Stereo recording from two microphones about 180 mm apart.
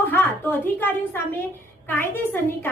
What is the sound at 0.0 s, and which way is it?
A woman's voice, 10° left (ahead or behind).